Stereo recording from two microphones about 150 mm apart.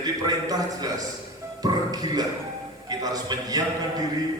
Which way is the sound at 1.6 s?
25° right (ahead or behind).